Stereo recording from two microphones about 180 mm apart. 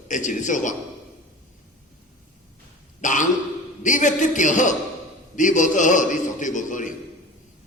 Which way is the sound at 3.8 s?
45° left (ahead or behind).